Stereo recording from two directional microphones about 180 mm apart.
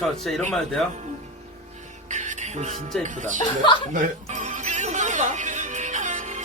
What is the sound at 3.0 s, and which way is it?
Speech, 45° right (ahead or behind).